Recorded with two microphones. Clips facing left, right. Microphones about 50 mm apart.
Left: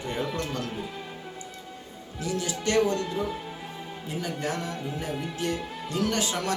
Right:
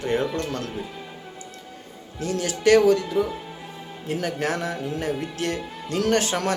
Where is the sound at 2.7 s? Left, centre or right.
Right.